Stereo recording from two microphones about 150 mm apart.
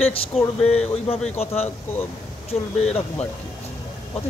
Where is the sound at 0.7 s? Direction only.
45° left (ahead or behind).